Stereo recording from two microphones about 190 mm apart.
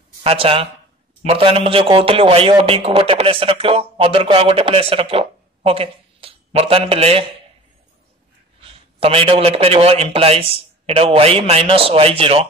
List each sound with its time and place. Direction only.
0.2 s a man's voice: 30° right (ahead or behind)
8.5 s a man's voice: 30° right (ahead or behind)